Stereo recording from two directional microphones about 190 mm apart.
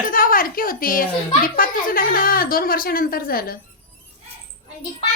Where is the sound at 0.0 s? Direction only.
45° left (ahead or behind).